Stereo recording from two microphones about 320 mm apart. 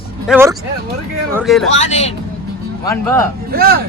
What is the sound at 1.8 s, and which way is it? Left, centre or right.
Speech, left.